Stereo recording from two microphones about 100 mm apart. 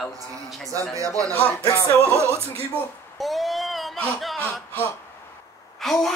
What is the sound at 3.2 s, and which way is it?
Child singing, centre (ahead or behind).